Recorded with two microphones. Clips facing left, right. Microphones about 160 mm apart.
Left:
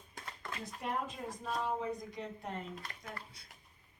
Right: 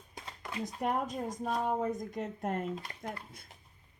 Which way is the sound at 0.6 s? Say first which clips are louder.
Right 6 dB; 40° right (ahead or behind).